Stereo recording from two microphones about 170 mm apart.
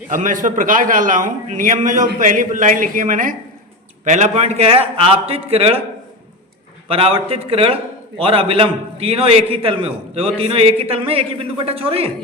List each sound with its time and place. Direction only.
0.1 s a man's voice: 50° right (ahead or behind)
6.8 s a man's voice: 35° right (ahead or behind)